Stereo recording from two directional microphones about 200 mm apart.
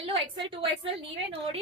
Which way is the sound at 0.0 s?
25° right (ahead or behind).